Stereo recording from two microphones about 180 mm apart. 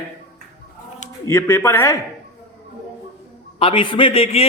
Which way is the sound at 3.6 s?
30° left (ahead or behind).